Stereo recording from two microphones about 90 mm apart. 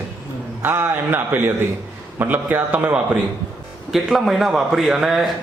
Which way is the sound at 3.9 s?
Centre (ahead or behind).